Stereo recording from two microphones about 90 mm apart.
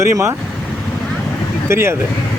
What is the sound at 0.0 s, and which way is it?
Speech, 35° right (ahead or behind).